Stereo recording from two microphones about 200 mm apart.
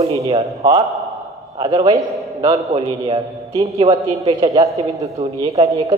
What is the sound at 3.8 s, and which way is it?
A man's voice, 25° right (ahead or behind).